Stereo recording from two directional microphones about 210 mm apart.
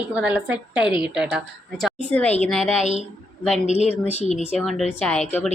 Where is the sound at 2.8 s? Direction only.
35° left (ahead or behind).